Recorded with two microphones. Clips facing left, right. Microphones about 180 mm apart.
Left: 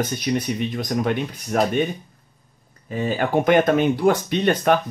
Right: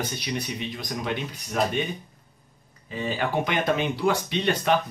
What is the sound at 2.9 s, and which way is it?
Speech, 50° left (ahead or behind).